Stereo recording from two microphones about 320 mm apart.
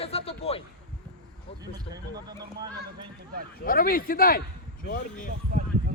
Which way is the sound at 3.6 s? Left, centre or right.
Left.